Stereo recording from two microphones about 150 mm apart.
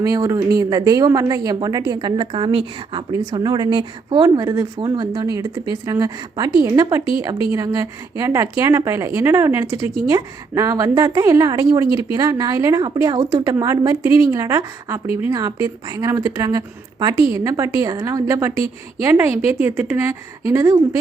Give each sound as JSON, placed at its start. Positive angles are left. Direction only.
{"t": 0.0, "sound": "a woman's voice", "side_deg": -25}
{"t": 11.9, "sound": "speech", "side_deg": 35}
{"t": 12.1, "sound": "a woman's voice", "side_deg": -25}